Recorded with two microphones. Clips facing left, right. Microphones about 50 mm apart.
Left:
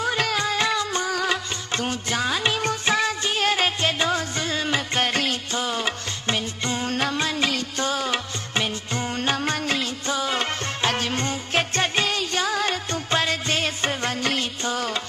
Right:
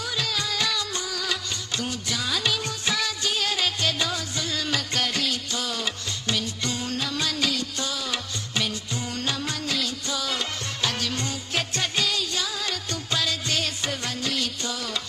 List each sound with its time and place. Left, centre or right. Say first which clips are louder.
0.0 s music: left 6 dB; left